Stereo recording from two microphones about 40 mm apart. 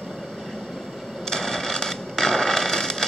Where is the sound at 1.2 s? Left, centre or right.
Centre.